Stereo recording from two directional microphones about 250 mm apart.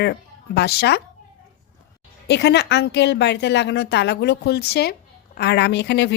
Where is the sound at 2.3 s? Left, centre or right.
Left.